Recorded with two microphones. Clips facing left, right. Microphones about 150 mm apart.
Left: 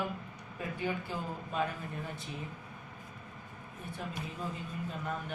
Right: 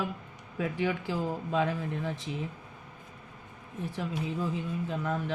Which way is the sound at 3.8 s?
90° right.